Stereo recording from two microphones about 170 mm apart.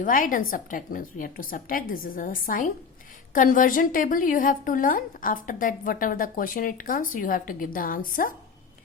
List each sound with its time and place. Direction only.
0.0 s a woman's voice: 55° left (ahead or behind)